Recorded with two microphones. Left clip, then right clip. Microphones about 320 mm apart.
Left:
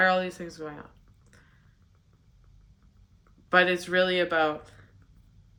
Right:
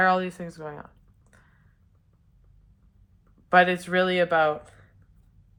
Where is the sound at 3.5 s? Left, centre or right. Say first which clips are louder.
Right 3 dB; centre.